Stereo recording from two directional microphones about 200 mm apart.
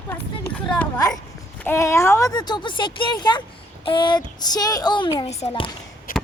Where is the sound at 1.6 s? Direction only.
10° left (ahead or behind).